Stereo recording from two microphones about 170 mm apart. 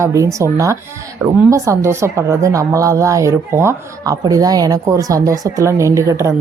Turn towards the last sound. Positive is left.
turn(degrees=-15)  # may be behind; listen again after turning